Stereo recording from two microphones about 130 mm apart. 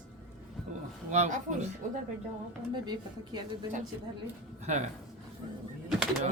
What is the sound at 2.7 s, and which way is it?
Speech, 35° right (ahead or behind).